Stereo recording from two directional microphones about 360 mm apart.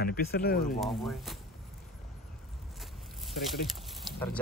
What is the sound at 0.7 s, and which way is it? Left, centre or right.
Speech, centre.